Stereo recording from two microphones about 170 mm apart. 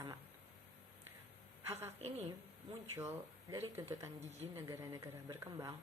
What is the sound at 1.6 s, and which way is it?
Speech, 15° right (ahead or behind).